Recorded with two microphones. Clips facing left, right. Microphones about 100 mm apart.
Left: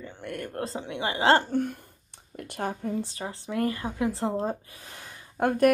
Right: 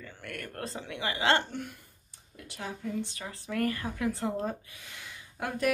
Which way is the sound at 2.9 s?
30° left (ahead or behind).